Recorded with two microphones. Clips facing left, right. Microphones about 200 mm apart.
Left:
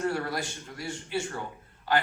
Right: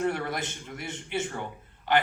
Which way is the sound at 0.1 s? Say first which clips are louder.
Even; 20° right (ahead or behind).